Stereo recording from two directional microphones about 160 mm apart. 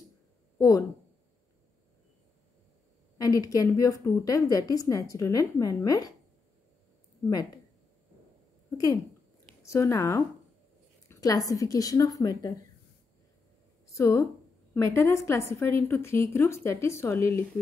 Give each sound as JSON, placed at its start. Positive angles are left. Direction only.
{"t": 0.6, "sound": "speech", "side_deg": 20}
{"t": 3.2, "sound": "a woman's voice", "side_deg": 20}
{"t": 8.7, "sound": "a woman's voice", "side_deg": 20}
{"t": 13.8, "sound": "a woman's voice", "side_deg": 20}